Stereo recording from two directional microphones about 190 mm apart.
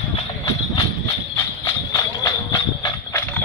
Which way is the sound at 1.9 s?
20° left (ahead or behind).